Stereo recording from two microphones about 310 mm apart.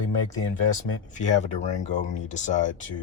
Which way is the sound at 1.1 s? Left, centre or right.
Left.